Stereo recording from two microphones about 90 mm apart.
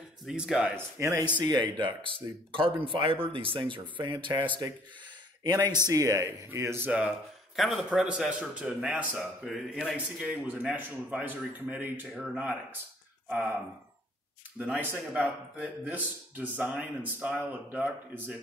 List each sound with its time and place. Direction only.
0.3 s speech: 5° right (ahead or behind)
0.7 s speech: 30° right (ahead or behind)
1.4 s speech: 55° right (ahead or behind)
5.4 s speech: 45° right (ahead or behind); by 6.9 s 30° right (ahead or behind)
6.9 s a man's voice: 10° right (ahead or behind)
9.5 s speech: centre (ahead or behind)
10.3 s a man's voice: 20° right (ahead or behind)
14.8 s speech: 20° right (ahead or behind)